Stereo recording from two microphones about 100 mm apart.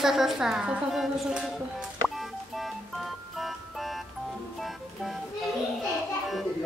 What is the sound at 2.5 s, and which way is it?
Music, centre (ahead or behind).